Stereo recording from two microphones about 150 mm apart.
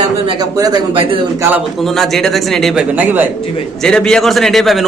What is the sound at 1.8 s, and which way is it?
A man's voice, centre (ahead or behind).